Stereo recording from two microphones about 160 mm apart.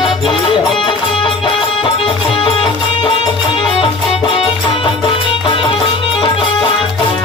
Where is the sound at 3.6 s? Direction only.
35° left (ahead or behind).